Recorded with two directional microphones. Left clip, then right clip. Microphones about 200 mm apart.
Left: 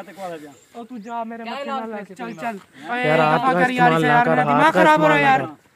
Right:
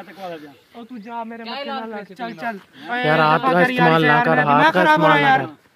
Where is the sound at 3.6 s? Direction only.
10° left (ahead or behind).